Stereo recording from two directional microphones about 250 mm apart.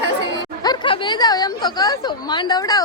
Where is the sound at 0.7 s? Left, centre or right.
Centre.